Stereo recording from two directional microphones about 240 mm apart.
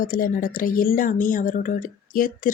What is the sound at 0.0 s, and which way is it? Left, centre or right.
Speech, left.